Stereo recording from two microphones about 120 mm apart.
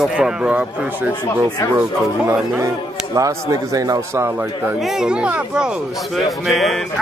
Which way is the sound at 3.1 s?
30° right (ahead or behind).